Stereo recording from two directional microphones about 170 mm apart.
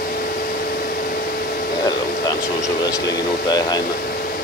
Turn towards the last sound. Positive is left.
turn(degrees=20)  # may be behind; listen again after turning